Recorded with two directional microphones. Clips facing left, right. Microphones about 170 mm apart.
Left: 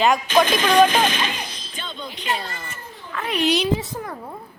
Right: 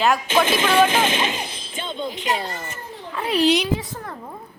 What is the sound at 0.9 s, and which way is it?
Music, 20° right (ahead or behind).